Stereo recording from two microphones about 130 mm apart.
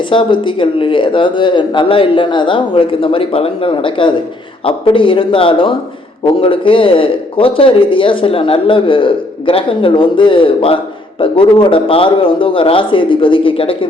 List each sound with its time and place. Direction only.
0.0 s speech: 40° left (ahead or behind)